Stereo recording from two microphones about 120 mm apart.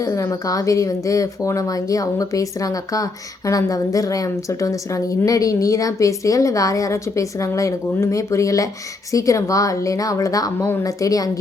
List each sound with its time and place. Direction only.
0.0 s speech: 25° left (ahead or behind)